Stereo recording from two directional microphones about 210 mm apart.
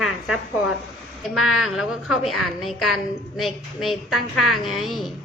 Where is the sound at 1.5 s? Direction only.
Centre (ahead or behind).